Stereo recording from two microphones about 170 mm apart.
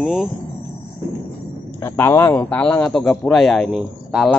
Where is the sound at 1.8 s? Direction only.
15° left (ahead or behind).